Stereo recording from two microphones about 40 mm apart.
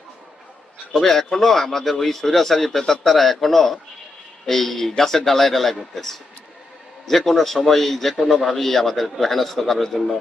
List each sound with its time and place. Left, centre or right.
0.9 s a man's voice: centre